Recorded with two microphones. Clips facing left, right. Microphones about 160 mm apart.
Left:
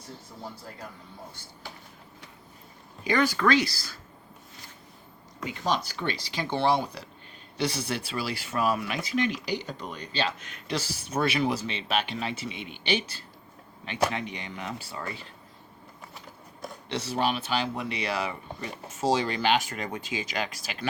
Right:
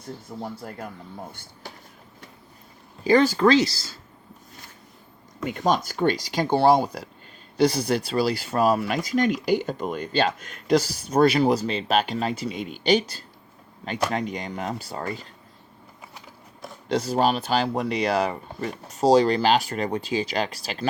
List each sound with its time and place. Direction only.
0.5 s speech: 60° right (ahead or behind)
3.0 s speech: 30° right (ahead or behind)
5.4 s speech: 50° right (ahead or behind)
16.9 s speech: 40° right (ahead or behind)